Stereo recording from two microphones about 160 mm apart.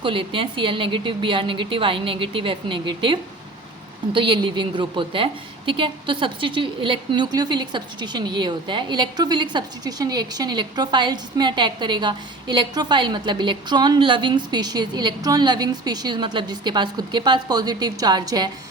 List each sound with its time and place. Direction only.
0.0 s a woman's voice: 30° right (ahead or behind)